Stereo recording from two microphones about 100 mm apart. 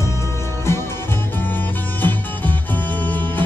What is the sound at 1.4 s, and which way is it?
Music, 20° left (ahead or behind).